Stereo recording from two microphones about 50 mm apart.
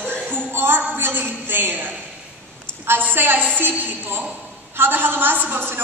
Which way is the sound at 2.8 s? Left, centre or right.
Right.